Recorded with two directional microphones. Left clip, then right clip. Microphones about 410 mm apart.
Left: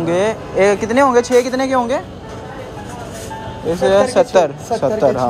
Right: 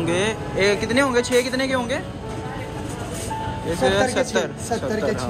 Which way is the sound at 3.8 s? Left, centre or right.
Centre.